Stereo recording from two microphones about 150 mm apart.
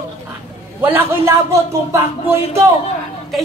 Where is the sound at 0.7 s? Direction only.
15° right (ahead or behind).